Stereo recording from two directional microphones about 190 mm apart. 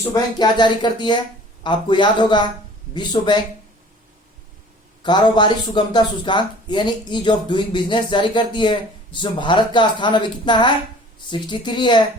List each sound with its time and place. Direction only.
0.0 s speech: 20° left (ahead or behind)
5.0 s speech: 25° left (ahead or behind)